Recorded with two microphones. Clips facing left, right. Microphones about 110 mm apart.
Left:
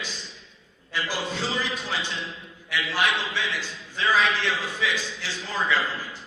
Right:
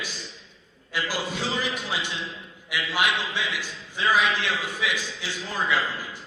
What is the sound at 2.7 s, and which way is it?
A man's voice, 15° right (ahead or behind).